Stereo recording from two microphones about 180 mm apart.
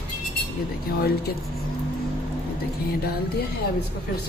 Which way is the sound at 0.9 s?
60° left (ahead or behind).